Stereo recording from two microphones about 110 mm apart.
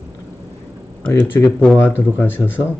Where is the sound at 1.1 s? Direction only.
20° left (ahead or behind).